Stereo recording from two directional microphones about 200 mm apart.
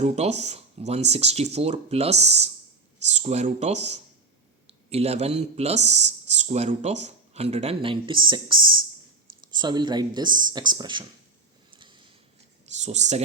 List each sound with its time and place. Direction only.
0.0 s speech: 35° right (ahead or behind)
11.7 s a sound: 25° right (ahead or behind)
12.7 s speech: 35° right (ahead or behind)